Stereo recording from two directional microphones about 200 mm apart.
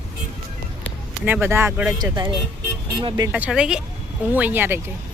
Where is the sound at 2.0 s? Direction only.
20° right (ahead or behind).